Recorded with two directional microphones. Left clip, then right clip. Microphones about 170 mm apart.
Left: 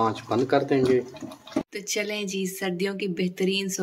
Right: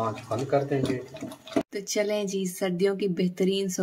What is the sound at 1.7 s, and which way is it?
Speech, 60° right (ahead or behind).